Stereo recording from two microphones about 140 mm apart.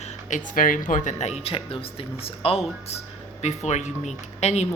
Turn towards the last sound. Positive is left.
turn(degrees=50)  # may be behind; listen again after turning